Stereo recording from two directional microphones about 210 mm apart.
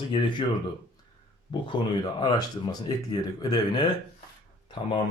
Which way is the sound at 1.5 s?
20° left (ahead or behind).